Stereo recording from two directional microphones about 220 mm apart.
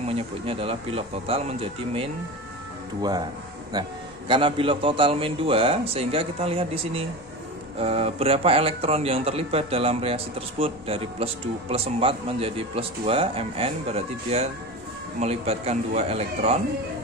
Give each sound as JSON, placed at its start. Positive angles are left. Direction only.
{"t": 0.1, "sound": "a man's voice", "side_deg": -25}